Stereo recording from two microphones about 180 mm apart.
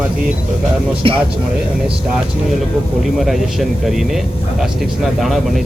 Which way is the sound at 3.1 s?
Centre (ahead or behind).